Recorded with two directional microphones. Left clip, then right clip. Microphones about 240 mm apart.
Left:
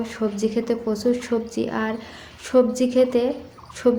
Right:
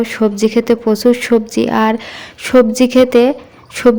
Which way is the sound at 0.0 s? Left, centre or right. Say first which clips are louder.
Right 11 dB; right.